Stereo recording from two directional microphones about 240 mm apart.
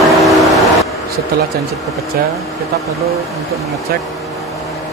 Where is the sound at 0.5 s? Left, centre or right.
Centre.